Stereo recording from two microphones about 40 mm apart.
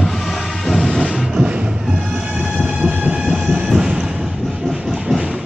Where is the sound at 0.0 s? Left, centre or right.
Centre.